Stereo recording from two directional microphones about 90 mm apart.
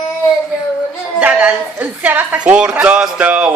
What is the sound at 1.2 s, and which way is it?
Speech, 20° right (ahead or behind).